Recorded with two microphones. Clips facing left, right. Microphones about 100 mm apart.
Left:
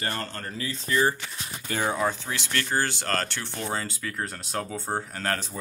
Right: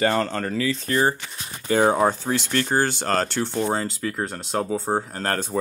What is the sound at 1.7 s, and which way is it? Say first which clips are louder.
Speech: right 8 dB; 35° right (ahead or behind).